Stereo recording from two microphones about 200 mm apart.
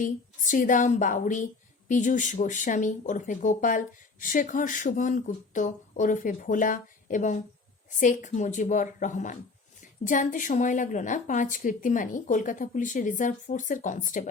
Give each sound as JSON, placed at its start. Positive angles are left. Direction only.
{"t": 0.0, "sound": "speech", "side_deg": 40}